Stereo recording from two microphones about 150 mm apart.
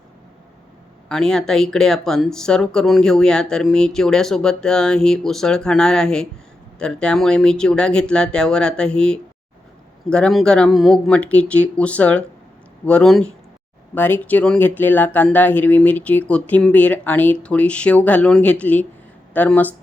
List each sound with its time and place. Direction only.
1.0 s speech: 5° left (ahead or behind)